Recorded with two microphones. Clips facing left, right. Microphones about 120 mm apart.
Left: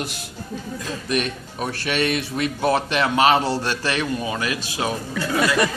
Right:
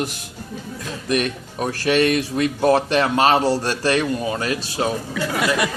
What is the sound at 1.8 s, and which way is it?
A man's voice, 45° right (ahead or behind).